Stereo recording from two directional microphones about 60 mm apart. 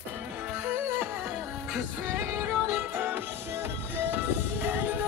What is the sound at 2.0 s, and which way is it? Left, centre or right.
Music, right.